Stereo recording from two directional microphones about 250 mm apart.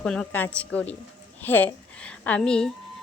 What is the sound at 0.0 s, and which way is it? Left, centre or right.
A woman's voice, centre.